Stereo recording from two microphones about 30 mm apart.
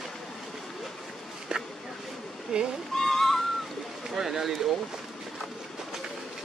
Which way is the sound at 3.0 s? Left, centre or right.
Centre.